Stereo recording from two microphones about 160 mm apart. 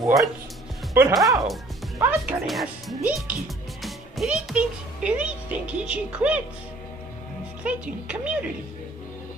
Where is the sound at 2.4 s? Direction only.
Centre (ahead or behind).